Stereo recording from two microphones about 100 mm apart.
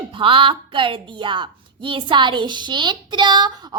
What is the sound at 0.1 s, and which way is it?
A woman's voice, 60° right (ahead or behind).